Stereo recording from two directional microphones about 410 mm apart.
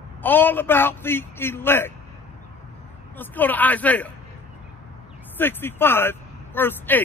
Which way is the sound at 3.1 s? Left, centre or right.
Centre.